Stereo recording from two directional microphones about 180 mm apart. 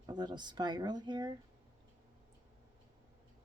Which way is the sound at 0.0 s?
25° right (ahead or behind).